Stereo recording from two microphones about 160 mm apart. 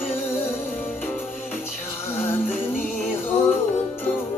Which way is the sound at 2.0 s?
15° left (ahead or behind).